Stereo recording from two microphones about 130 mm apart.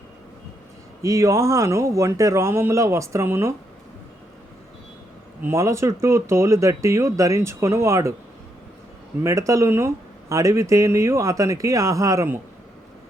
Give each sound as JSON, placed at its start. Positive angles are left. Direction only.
{"t": 1.0, "sound": "speech", "side_deg": -25}
{"t": 5.5, "sound": "speech", "side_deg": -20}
{"t": 9.2, "sound": "speech", "side_deg": -25}